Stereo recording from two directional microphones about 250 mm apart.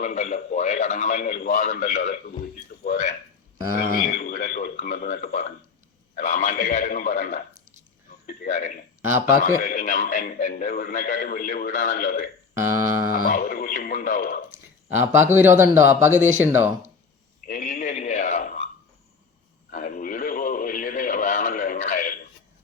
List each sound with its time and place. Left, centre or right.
0.0 s a man's voice: left
9.0 s a sound: centre
9.4 s a man's voice: left
12.5 s speech: centre
13.1 s a man's voice: left
14.8 s speech: centre
17.4 s a sound: left
19.7 s radio: left